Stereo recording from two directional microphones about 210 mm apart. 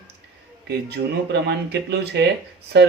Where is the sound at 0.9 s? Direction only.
55° right (ahead or behind).